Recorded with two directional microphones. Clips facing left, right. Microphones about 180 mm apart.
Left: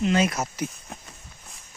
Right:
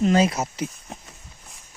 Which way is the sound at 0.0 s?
40° right (ahead or behind).